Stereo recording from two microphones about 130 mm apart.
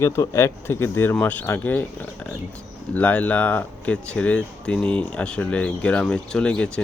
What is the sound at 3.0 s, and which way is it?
Speech, 10° left (ahead or behind).